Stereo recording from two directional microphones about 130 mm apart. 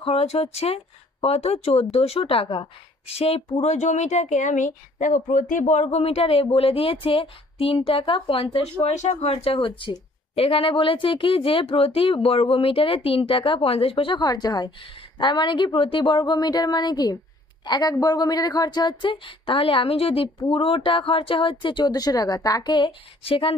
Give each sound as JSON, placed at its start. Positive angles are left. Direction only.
{"t": 0.0, "sound": "speech", "side_deg": 50}
{"t": 3.5, "sound": "speech", "side_deg": 65}
{"t": 8.8, "sound": "speech", "side_deg": 65}
{"t": 13.9, "sound": "a woman's voice", "side_deg": 35}